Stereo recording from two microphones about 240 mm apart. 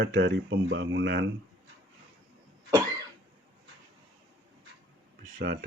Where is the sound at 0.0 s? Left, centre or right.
Right.